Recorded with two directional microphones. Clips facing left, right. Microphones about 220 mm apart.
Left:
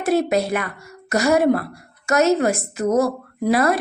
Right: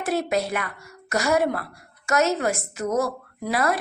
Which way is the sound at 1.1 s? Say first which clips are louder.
Left 6 dB; 35° left (ahead or behind).